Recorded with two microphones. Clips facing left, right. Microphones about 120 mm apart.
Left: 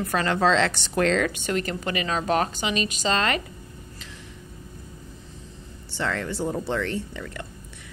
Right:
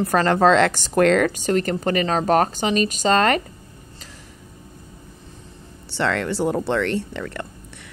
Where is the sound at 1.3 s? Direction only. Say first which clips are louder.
Right 6 dB; 40° right (ahead or behind).